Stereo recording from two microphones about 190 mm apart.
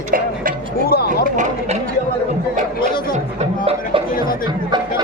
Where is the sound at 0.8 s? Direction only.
55° left (ahead or behind).